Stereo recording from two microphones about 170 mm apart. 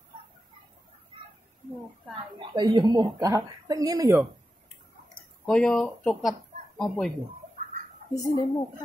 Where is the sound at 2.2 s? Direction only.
25° right (ahead or behind).